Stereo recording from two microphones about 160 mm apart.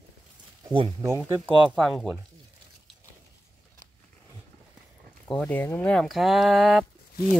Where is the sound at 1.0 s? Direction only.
15° right (ahead or behind).